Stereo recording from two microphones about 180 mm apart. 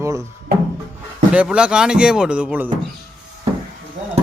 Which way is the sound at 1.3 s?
5° right (ahead or behind).